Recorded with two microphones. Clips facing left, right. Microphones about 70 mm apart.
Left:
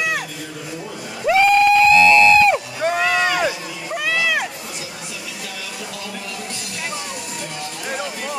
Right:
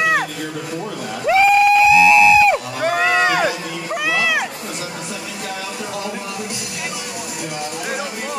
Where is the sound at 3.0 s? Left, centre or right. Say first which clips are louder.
Right 3 dB; right.